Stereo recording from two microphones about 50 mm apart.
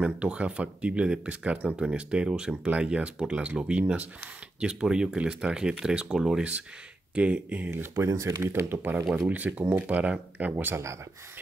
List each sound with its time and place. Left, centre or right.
0.0 s speech: right
7.4 s speech: right
7.9 s speech: right
8.4 s speech: right
9.3 s speech: right
10.5 s speech: right